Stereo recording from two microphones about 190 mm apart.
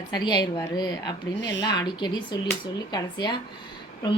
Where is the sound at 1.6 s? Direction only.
20° left (ahead or behind).